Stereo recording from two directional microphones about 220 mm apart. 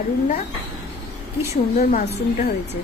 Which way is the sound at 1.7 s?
40° left (ahead or behind).